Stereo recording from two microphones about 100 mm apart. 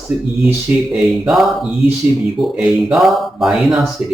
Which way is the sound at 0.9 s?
Centre (ahead or behind).